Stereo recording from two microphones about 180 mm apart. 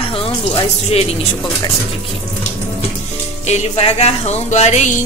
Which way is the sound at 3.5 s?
35° left (ahead or behind).